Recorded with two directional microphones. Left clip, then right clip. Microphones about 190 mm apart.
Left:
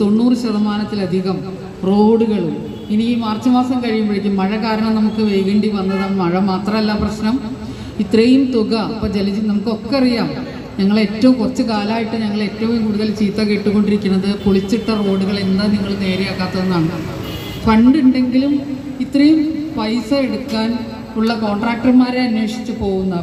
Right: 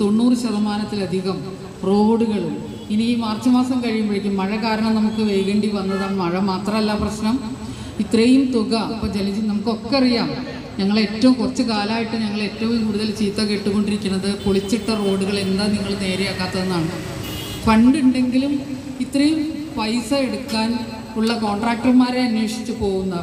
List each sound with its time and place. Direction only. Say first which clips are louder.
0.0 s a man's voice: left 3 dB; 30° left (ahead or behind)
18.9 s a sound: left 5 dB; 30° left (ahead or behind)
19.8 s a woman's voice: left 2 dB; 30° left (ahead or behind)